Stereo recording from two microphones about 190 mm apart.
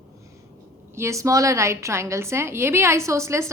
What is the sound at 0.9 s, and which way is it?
A woman's voice, 15° right (ahead or behind).